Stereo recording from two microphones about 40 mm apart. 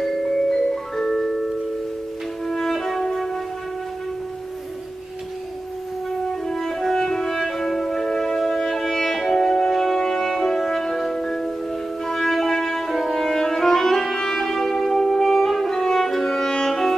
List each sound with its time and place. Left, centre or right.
0.0 s music: centre
6.4 s music: centre